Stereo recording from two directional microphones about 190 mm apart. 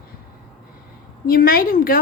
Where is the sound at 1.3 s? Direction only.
50° left (ahead or behind).